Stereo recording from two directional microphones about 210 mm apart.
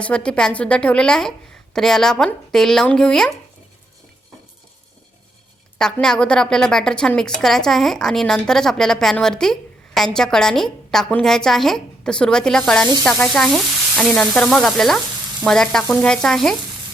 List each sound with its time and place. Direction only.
0.0 s a woman's voice: 5° left (ahead or behind)
5.8 s a woman's voice: 5° left (ahead or behind)